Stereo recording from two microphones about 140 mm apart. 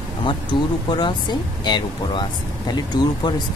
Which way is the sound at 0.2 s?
35° left (ahead or behind).